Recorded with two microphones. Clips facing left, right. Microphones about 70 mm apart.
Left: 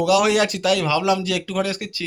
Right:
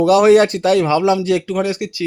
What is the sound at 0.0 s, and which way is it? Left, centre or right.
Speech, right.